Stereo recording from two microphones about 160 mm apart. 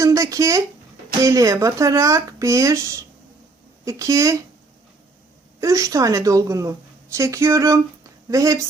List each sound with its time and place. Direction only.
0.0 s a sound: 20° right (ahead or behind)
1.2 s speech: 20° right (ahead or behind)
5.5 s speech: 20° right (ahead or behind)